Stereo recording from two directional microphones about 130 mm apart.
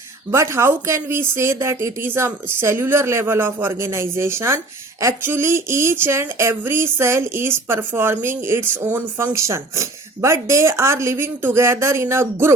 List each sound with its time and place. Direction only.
0.3 s speech: 20° right (ahead or behind)